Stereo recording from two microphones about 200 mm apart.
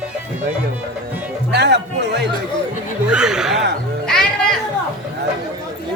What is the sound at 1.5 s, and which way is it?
Speech, 60° right (ahead or behind).